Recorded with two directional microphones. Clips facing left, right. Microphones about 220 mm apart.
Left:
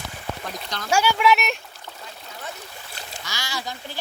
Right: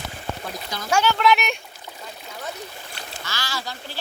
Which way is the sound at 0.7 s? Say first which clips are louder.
Right 1 dB; 5° right (ahead or behind).